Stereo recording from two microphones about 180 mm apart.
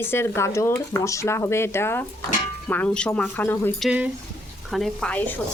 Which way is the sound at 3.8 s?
5° right (ahead or behind).